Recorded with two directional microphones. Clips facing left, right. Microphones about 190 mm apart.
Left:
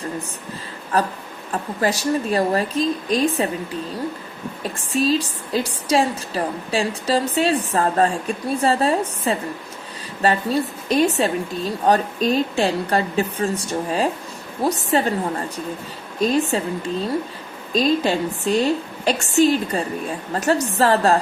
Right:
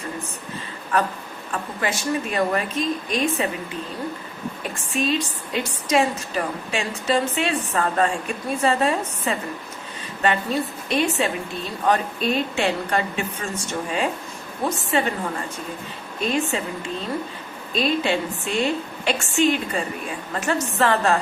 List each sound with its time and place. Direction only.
0.9 s a woman's voice: 35° left (ahead or behind)
4.9 s a woman's voice: 35° left (ahead or behind)
16.3 s a woman's voice: 35° left (ahead or behind)
17.7 s a woman's voice: 40° left (ahead or behind)